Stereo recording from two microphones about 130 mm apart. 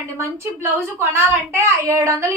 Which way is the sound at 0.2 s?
20° right (ahead or behind).